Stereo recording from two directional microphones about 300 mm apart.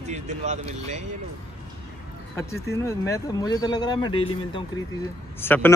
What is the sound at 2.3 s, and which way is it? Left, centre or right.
Speech, centre.